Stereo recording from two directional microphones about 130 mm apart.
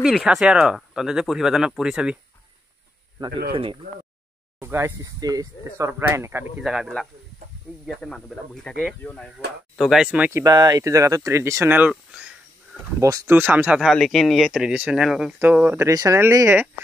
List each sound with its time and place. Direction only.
0.0 s speech: 5° right (ahead or behind)
4.6 s speech: 20° right (ahead or behind)
6.5 s speech: 5° right (ahead or behind)
9.8 s speech: 5° right (ahead or behind)
10.3 s speech: 30° right (ahead or behind)
11.9 s a sound: 10° right (ahead or behind)
13.0 s speech: 20° right (ahead or behind)
13.7 s speech: centre (ahead or behind)
15.3 s speech: 15° right (ahead or behind)